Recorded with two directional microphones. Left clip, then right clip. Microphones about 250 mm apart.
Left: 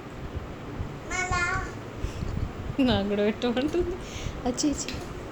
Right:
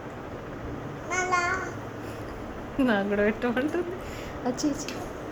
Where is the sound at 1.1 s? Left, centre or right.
Centre.